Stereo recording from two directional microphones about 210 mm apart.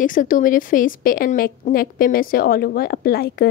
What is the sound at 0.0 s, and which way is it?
Speech, 40° left (ahead or behind).